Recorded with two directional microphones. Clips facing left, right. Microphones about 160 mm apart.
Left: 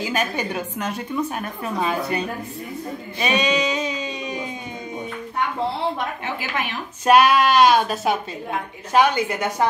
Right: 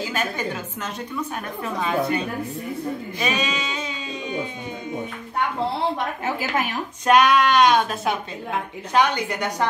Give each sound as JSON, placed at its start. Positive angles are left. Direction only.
{"t": 0.1, "sound": "a woman's voice", "side_deg": 15}
{"t": 3.2, "sound": "a sound", "side_deg": 0}
{"t": 6.2, "sound": "a woman's voice", "side_deg": -40}
{"t": 7.1, "sound": "a woman's voice", "side_deg": 5}